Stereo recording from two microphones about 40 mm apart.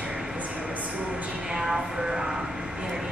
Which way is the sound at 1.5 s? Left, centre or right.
Centre.